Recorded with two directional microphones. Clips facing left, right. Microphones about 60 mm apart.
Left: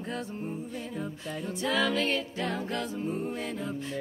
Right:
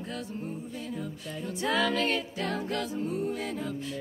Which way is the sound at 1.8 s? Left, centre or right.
Left.